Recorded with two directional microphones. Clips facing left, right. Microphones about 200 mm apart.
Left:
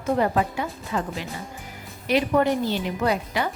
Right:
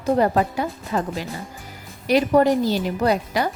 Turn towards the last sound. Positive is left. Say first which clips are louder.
# right 3 dB
turn(degrees=-40)  # may be behind; listen again after turning